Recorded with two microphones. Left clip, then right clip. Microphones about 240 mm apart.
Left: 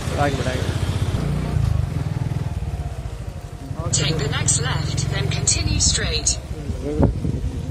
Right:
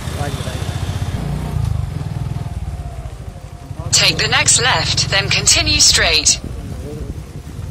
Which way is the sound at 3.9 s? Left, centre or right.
Right.